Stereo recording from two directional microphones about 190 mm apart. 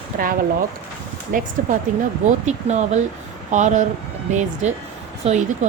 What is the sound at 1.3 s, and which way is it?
A woman's voice, 45° right (ahead or behind).